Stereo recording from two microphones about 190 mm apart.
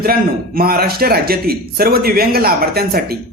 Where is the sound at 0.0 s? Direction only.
50° right (ahead or behind).